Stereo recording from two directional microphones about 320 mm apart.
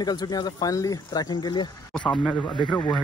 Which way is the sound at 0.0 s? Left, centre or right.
Centre.